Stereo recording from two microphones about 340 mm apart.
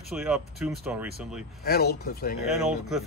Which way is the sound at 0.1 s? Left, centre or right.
Centre.